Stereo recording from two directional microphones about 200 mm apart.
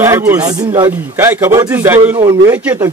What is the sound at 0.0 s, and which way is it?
A man's voice, 15° right (ahead or behind).